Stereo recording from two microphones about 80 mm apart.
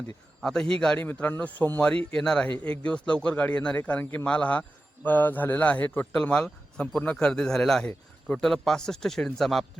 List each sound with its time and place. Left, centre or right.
0.4 s a man's voice: centre
1.0 s a man's voice: left
2.1 s a man's voice: centre